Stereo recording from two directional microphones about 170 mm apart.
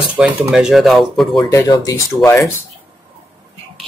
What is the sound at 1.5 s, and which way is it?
Speech, 20° left (ahead or behind).